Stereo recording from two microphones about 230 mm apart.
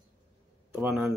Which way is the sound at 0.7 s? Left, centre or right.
Centre.